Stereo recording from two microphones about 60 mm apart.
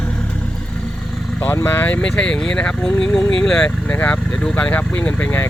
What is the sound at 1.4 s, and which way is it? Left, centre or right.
Speech, left.